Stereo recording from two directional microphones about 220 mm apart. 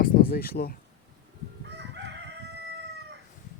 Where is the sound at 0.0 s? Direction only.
40° left (ahead or behind).